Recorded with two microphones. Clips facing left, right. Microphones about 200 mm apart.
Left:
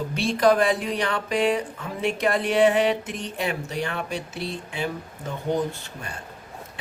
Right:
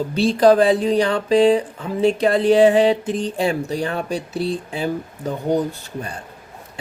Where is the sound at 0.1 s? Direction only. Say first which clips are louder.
Right 6 dB; 30° right (ahead or behind).